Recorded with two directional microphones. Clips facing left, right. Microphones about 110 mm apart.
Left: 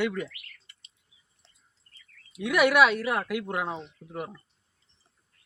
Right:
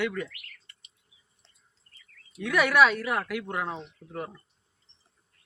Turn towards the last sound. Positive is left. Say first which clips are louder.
# even
turn(degrees=10)  # may be behind; listen again after turning